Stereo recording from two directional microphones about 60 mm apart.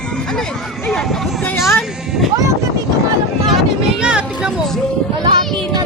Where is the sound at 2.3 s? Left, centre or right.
Right.